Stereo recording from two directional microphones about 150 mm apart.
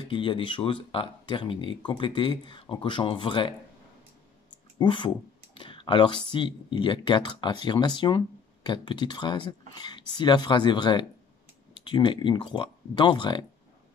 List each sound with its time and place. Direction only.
0.1 s speech: 35° left (ahead or behind)
4.7 s speech: 30° left (ahead or behind)